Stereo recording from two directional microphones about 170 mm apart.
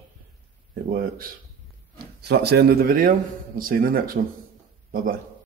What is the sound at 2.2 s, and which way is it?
Speech, 70° right (ahead or behind).